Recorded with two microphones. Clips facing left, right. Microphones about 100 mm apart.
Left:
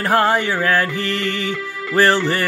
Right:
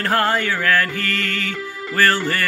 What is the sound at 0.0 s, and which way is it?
Speech, 15° left (ahead or behind).